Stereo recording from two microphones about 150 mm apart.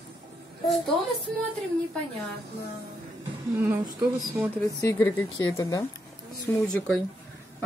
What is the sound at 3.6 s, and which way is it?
Speech, 15° right (ahead or behind).